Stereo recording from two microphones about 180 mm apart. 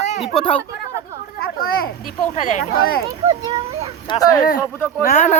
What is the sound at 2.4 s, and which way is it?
Speech, 45° left (ahead or behind).